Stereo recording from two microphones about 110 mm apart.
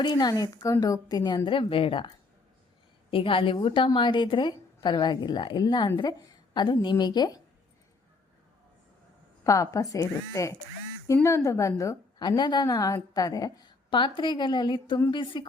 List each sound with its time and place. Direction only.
0.0 s a woman's voice: 40° left (ahead or behind)
1.5 s a woman's voice: 55° left (ahead or behind)
3.1 s a woman's voice: 50° left (ahead or behind); by 7.4 s 35° left (ahead or behind)
9.4 s speech: 30° left (ahead or behind)
12.4 s a woman's voice: 40° left (ahead or behind)